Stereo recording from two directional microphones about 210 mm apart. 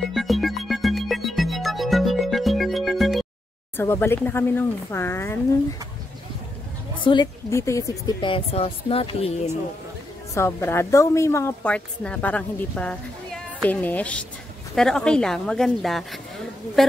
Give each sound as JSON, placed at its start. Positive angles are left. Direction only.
{"t": 0.1, "sound": "music", "side_deg": 0}
{"t": 3.7, "sound": "a woman's voice", "side_deg": 10}
{"t": 7.0, "sound": "a woman's voice", "side_deg": 25}
{"t": 10.3, "sound": "a woman's voice", "side_deg": 10}